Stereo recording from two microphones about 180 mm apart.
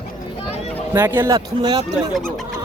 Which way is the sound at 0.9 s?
10° right (ahead or behind).